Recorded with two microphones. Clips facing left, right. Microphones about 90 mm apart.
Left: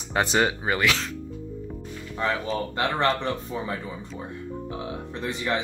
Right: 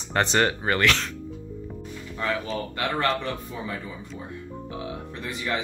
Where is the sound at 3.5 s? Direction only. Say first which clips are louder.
Left 3 dB; 35° left (ahead or behind).